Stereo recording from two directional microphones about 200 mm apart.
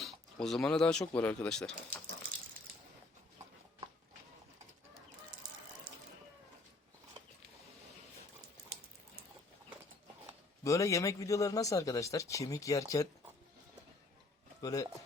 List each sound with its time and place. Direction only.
0.0 s speech: centre (ahead or behind)
10.6 s a man's voice: 15° left (ahead or behind)
14.6 s speech: 20° left (ahead or behind)